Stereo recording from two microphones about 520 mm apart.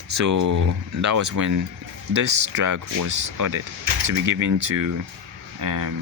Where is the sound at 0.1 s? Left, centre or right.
Right.